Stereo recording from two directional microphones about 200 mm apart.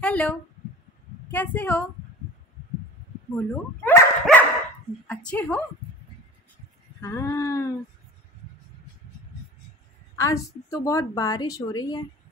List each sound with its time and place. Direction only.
0.0 s a woman's voice: 5° left (ahead or behind)
3.3 s a woman's voice: 5° left (ahead or behind)
7.0 s a woman's voice: 15° left (ahead or behind)
10.1 s a woman's voice: 15° left (ahead or behind)